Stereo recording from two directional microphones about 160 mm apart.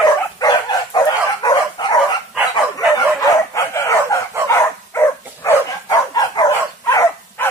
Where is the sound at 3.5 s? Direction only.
20° left (ahead or behind).